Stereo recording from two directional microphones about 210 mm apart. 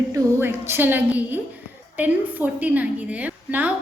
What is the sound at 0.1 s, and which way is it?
A woman's voice, 10° right (ahead or behind).